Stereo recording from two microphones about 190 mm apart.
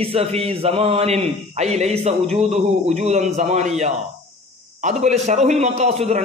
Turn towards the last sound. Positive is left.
turn(degrees=-35)  # may be behind; listen again after turning